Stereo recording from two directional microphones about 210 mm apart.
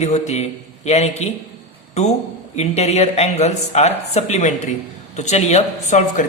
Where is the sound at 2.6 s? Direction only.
30° left (ahead or behind).